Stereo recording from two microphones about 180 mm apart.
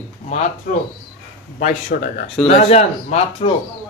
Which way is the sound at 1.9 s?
55° left (ahead or behind).